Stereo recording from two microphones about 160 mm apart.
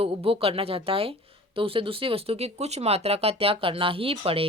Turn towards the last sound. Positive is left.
turn(degrees=-35)  # may be behind; listen again after turning